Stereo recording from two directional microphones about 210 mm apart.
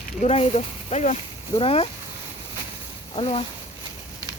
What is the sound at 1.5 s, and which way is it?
Speech, 25° left (ahead or behind).